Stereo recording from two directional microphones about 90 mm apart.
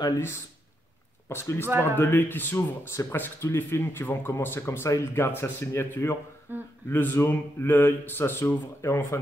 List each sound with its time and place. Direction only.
1.3 s speech: 30° left (ahead or behind)
1.7 s speech: 25° right (ahead or behind)
2.0 s speech: 25° left (ahead or behind)
6.5 s speech: 25° right (ahead or behind)
6.9 s speech: 25° left (ahead or behind)